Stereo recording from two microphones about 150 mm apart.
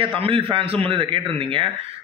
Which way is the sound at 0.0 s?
35° right (ahead or behind).